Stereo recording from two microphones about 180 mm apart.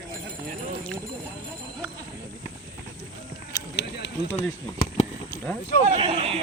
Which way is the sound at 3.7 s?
70° left (ahead or behind).